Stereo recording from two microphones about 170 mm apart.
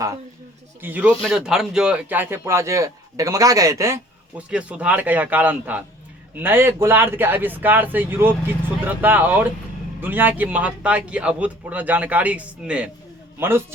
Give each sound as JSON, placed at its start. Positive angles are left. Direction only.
{"t": 0.8, "sound": "speech", "side_deg": -10}